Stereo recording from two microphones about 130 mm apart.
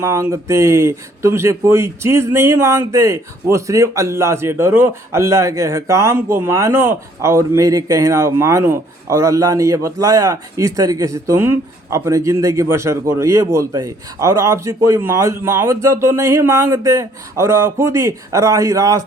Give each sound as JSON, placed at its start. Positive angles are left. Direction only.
{"t": 0.0, "sound": "speech", "side_deg": -20}